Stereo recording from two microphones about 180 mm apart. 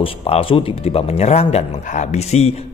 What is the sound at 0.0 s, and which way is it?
Speech, 30° left (ahead or behind).